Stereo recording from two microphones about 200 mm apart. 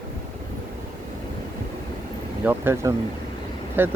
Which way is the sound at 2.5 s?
10° right (ahead or behind).